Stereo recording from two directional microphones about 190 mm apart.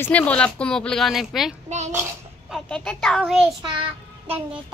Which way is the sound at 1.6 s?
35° right (ahead or behind).